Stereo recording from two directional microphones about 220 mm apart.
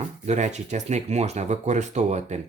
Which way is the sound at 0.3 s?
30° right (ahead or behind).